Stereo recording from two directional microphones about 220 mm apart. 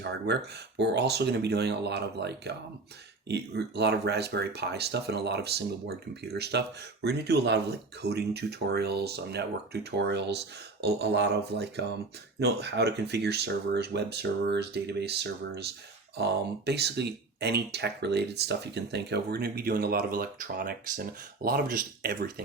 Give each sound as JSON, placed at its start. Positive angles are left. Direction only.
{"t": 0.0, "sound": "speech", "side_deg": -50}